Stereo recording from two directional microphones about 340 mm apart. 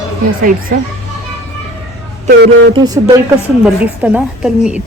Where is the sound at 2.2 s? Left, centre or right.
Right.